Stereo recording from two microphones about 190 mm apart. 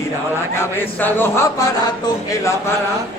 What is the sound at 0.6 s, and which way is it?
A man's voice, 10° left (ahead or behind).